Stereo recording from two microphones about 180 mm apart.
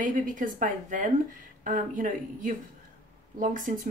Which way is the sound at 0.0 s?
45° right (ahead or behind).